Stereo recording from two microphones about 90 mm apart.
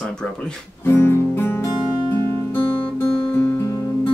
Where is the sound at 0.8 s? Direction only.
25° left (ahead or behind).